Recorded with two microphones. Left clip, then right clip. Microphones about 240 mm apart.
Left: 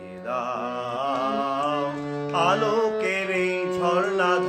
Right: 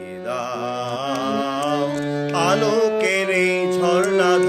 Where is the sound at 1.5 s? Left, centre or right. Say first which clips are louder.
Right 3 dB; right.